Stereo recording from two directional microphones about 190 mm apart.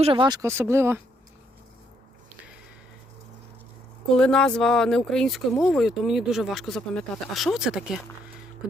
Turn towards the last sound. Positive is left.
turn(degrees=-5)  # may be behind; listen again after turning